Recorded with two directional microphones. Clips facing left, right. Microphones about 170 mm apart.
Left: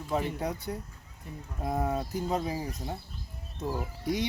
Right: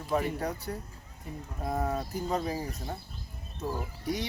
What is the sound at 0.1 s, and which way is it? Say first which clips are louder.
Speech: right 1 dB; 20° left (ahead or behind).